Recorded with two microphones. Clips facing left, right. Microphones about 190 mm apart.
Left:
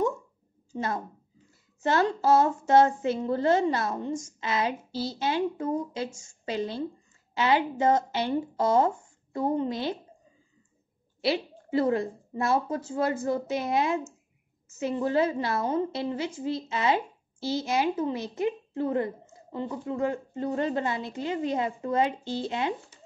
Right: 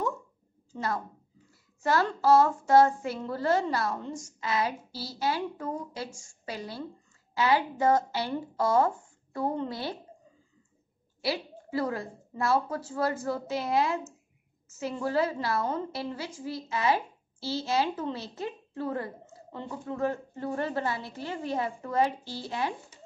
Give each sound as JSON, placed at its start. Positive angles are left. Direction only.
{"t": 0.7, "sound": "child singing", "side_deg": 20}
{"t": 11.1, "sound": "child singing", "side_deg": 20}